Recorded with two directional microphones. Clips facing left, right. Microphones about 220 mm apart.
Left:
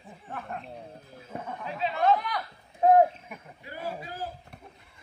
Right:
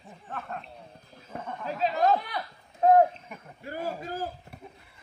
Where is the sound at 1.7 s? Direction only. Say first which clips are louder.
Right 1 dB; 40° right (ahead or behind).